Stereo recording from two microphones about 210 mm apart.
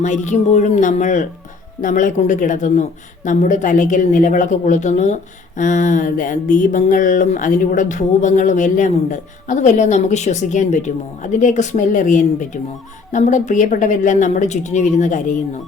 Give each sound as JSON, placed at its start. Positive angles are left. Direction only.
{"t": 0.0, "sound": "a woman's voice", "side_deg": 35}